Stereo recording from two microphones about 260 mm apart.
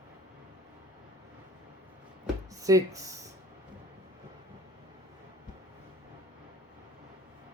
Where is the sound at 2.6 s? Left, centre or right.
Centre.